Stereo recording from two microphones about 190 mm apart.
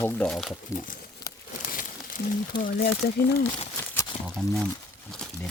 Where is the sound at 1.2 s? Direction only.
20° left (ahead or behind).